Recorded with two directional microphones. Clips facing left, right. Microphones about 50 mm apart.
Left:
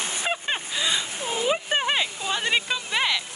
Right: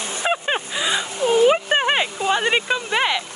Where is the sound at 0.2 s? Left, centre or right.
Centre.